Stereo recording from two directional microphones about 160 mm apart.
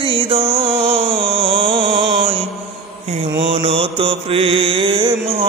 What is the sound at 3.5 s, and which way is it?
Mantra, 35° right (ahead or behind).